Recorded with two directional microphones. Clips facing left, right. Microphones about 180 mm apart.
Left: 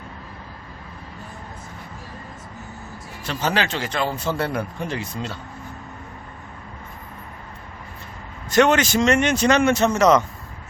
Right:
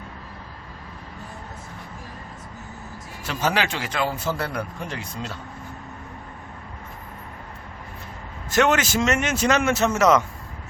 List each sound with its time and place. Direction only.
3.2 s a man's voice: 10° right (ahead or behind)
8.4 s a man's voice: 5° right (ahead or behind)